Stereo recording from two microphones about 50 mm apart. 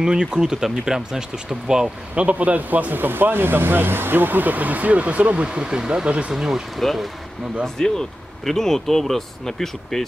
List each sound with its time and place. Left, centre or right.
0.0 s speech: centre
2.1 s speech: right
6.3 s speech: centre
7.6 s speech: centre